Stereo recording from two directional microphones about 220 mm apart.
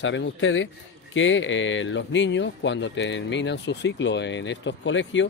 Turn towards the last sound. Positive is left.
turn(degrees=55)  # may be behind; listen again after turning